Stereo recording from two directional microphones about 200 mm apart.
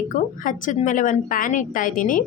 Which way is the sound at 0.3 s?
40° left (ahead or behind).